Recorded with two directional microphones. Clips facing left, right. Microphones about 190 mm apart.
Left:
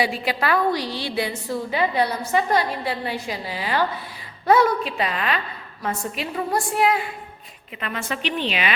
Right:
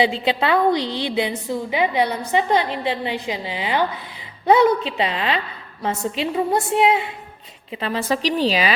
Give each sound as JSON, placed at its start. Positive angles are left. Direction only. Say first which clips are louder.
{"t": 0.0, "sound": "a woman's voice", "louder": "right 4 dB", "side_deg": -25}